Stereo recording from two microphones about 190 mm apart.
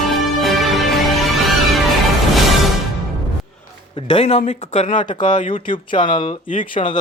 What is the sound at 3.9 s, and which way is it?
Speech, 30° left (ahead or behind).